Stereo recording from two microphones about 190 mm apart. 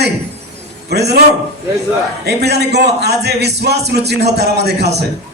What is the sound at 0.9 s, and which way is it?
Speech, 60° right (ahead or behind).